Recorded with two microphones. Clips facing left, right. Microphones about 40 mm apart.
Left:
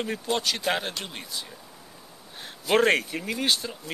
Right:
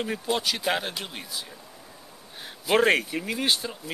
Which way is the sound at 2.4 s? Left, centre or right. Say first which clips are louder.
Even; centre.